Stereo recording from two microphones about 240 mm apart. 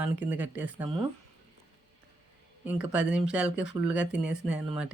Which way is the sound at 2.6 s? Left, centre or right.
Centre.